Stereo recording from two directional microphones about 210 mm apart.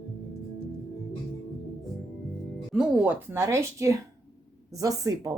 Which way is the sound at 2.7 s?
5° right (ahead or behind).